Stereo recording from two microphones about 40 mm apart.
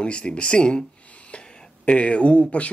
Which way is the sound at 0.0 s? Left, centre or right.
Left.